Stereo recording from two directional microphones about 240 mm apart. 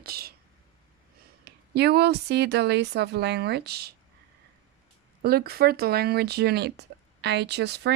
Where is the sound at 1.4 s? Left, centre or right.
Right.